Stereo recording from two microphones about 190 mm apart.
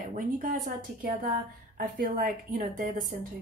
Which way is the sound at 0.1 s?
45° right (ahead or behind).